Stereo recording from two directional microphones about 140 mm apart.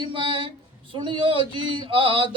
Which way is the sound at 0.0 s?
35° right (ahead or behind).